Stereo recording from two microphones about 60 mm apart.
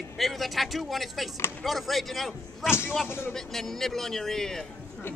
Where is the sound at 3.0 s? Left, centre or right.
Left.